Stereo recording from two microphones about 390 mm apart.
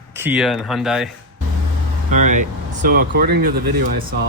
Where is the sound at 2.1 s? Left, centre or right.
Centre.